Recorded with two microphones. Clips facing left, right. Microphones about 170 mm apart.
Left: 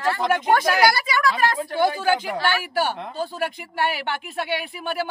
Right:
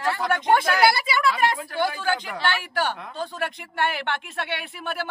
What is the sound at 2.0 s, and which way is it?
Speech, 10° left (ahead or behind).